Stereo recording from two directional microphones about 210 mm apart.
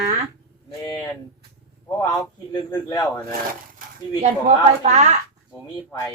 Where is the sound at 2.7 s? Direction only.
15° left (ahead or behind).